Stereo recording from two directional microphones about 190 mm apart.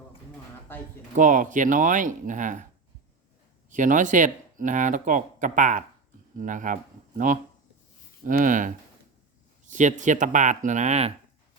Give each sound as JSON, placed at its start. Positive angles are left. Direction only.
{"t": 0.7, "sound": "a sound", "side_deg": 10}
{"t": 1.1, "sound": "speech", "side_deg": -45}
{"t": 3.7, "sound": "speech", "side_deg": -40}
{"t": 8.2, "sound": "speech", "side_deg": -45}